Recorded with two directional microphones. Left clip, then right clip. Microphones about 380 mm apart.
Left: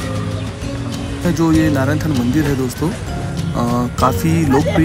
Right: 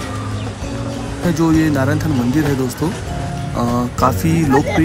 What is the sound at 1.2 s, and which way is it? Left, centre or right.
Speech, centre.